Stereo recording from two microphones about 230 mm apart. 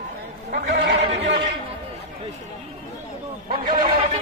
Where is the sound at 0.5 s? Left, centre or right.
Right.